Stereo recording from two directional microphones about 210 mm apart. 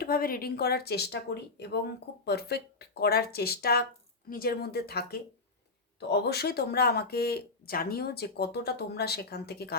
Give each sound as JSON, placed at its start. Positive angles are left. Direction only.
{"t": 0.0, "sound": "speech", "side_deg": 45}